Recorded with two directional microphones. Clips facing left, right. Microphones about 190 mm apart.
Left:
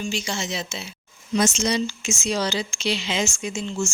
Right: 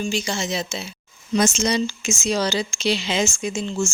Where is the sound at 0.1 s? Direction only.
40° right (ahead or behind).